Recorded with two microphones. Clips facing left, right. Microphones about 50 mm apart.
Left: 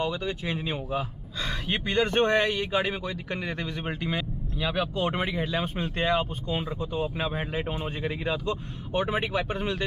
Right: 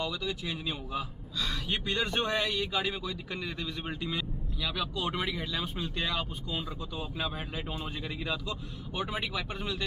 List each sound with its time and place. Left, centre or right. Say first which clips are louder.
0.0 s speech: left 5 dB; left